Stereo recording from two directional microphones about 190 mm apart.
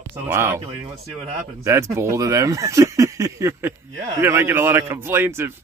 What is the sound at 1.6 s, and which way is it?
Speech, 15° right (ahead or behind).